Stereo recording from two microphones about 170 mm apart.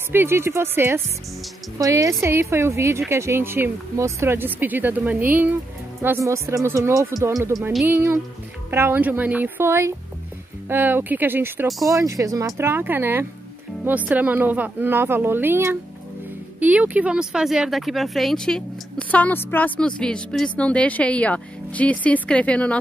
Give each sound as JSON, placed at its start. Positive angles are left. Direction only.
{"t": 0.1, "sound": "speech", "side_deg": -15}